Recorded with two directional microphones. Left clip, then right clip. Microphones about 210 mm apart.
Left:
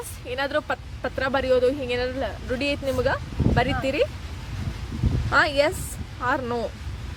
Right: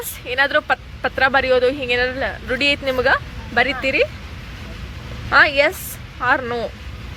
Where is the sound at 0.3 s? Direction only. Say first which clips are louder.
Right 8 dB; 5° left (ahead or behind).